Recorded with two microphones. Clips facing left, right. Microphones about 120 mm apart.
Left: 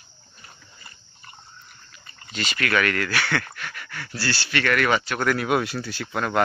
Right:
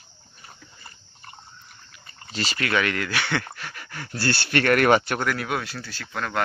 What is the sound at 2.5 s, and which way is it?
Speech, 20° right (ahead or behind).